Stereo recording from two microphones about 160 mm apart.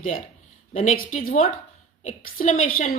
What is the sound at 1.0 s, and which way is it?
Speech, 60° left (ahead or behind).